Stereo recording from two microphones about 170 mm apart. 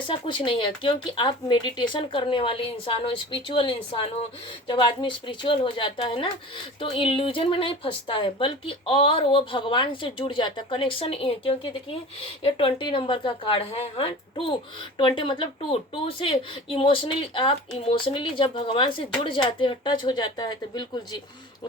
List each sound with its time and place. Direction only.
0.1 s speech: 30° left (ahead or behind)